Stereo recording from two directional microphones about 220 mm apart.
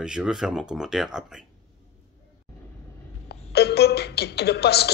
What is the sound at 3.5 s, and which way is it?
Speech, 45° left (ahead or behind).